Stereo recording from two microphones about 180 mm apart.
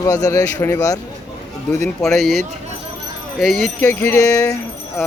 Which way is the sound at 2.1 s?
Centre (ahead or behind).